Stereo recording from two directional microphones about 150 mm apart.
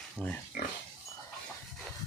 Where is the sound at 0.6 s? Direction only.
75° left (ahead or behind).